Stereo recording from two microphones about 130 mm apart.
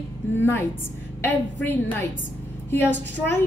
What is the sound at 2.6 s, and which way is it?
Speech, 15° left (ahead or behind).